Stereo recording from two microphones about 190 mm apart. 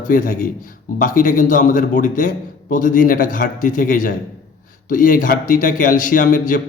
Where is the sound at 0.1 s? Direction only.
45° left (ahead or behind).